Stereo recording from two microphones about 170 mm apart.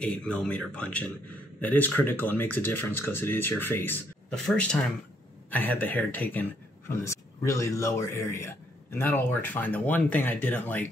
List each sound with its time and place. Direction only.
0.0 s a man's voice: 5° left (ahead or behind)